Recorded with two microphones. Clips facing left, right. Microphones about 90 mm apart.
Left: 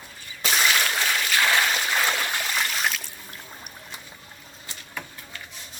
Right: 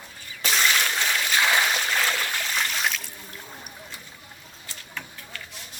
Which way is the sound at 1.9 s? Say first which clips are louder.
Left 1 dB; 15° left (ahead or behind).